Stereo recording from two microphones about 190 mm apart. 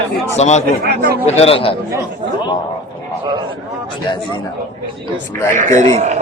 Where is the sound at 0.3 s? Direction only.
35° left (ahead or behind).